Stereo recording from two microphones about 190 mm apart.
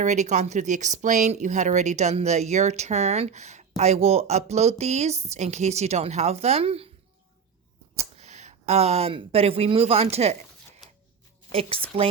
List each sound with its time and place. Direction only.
0.0 s speech: 40° right (ahead or behind)
7.9 s speech: 35° right (ahead or behind)
11.5 s speech: 30° right (ahead or behind)